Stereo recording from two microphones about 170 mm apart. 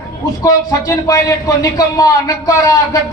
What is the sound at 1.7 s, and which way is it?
A man's voice, 20° left (ahead or behind).